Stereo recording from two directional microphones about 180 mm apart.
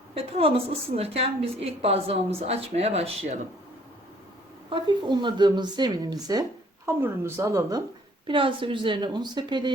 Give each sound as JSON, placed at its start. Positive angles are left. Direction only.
{"t": 0.1, "sound": "a woman's voice", "side_deg": -30}
{"t": 4.7, "sound": "speech", "side_deg": -25}
{"t": 8.3, "sound": "speech", "side_deg": -30}